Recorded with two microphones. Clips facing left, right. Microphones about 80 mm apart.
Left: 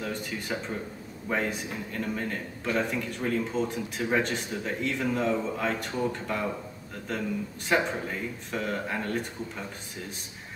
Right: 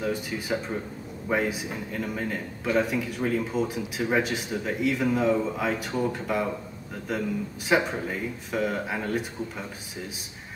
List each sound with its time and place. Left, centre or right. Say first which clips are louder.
0.0 s a man's voice: right 4 dB; centre